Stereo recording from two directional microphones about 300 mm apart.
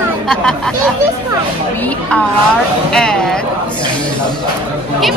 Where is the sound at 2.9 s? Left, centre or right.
Centre.